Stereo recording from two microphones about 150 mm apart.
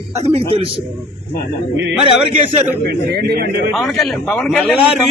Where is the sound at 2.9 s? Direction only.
90° right.